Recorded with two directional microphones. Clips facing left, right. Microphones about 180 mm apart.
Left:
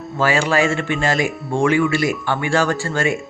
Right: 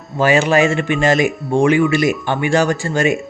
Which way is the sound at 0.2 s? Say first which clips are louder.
Right 4 dB; 20° right (ahead or behind).